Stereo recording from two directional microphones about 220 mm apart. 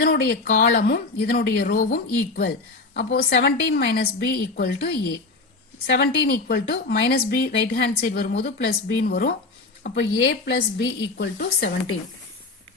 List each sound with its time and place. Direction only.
0.0 s speech: 45° left (ahead or behind)